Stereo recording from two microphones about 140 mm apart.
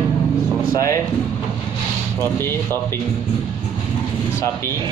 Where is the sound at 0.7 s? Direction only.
20° left (ahead or behind).